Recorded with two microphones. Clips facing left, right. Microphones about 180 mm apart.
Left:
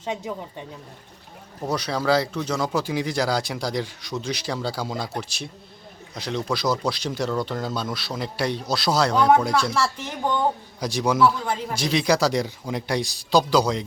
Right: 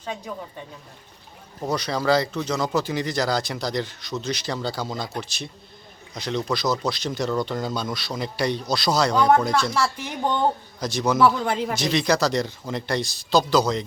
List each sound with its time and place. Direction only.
0.0 s speech: 20° left (ahead or behind)
1.6 s speech: 5° left (ahead or behind)
10.0 s speech: 10° right (ahead or behind)
10.8 s a man's voice: 10° left (ahead or behind)